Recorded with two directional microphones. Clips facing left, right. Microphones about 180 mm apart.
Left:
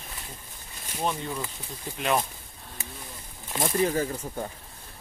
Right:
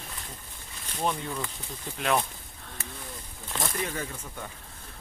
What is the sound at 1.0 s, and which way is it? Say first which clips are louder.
Speech: even; 5° left (ahead or behind).